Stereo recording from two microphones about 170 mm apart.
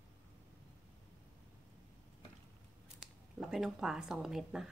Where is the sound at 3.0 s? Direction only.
Centre (ahead or behind).